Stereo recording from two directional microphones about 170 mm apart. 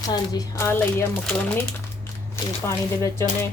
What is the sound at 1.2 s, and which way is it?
Speech, 5° left (ahead or behind).